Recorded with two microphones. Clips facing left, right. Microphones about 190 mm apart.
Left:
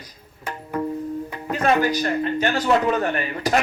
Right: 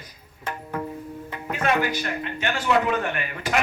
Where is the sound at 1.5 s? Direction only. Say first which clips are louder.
Left 4 dB; 40° left (ahead or behind).